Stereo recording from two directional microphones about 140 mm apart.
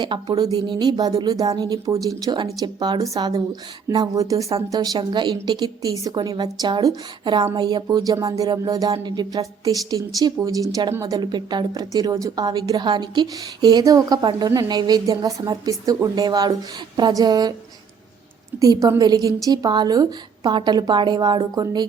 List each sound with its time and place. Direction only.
0.0 s speech: 30° right (ahead or behind)
18.6 s speech: 25° right (ahead or behind)